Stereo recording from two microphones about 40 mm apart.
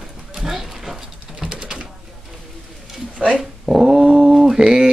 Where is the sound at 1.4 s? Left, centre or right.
Centre.